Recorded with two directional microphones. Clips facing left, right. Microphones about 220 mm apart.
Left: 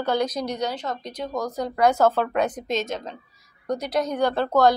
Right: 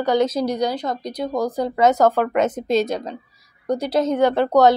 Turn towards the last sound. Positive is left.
turn(degrees=-20)  # may be behind; listen again after turning